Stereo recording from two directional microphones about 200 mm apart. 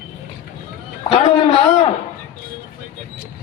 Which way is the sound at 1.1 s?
30° left (ahead or behind).